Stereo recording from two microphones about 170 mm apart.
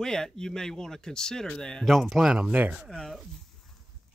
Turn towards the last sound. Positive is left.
turn(degrees=0)  # may be behind; listen again after turning